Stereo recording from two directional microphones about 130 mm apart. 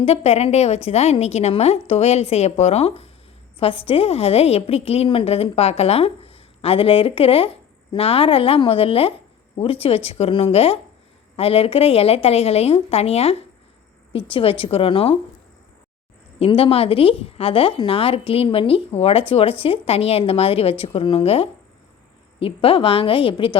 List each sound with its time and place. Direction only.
0.0 s a woman's voice: 55° left (ahead or behind)
16.4 s a woman's voice: 45° left (ahead or behind)